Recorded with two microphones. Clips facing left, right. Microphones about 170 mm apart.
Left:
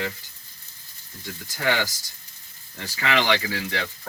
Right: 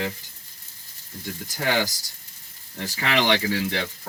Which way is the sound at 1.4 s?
20° right (ahead or behind).